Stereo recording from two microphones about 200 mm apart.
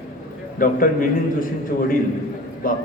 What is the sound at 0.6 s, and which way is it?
A man's voice, 45° left (ahead or behind).